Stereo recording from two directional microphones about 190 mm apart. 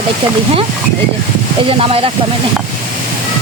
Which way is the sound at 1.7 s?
30° right (ahead or behind).